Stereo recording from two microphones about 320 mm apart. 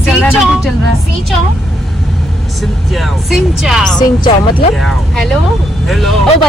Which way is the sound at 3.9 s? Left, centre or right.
Centre.